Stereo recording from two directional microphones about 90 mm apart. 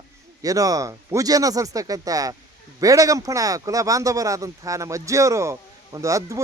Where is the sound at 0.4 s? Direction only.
40° right (ahead or behind).